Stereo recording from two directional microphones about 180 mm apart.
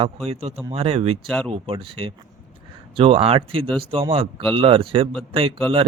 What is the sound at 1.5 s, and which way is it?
Speech, 30° right (ahead or behind).